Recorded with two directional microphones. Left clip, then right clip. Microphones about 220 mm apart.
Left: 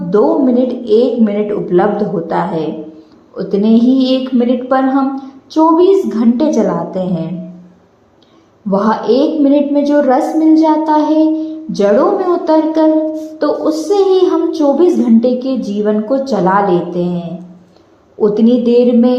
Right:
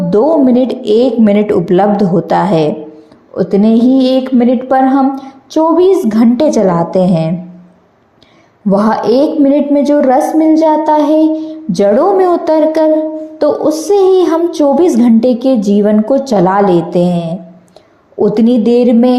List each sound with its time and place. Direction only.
0.1 s a woman's voice: 40° right (ahead or behind)
8.7 s a woman's voice: 40° right (ahead or behind)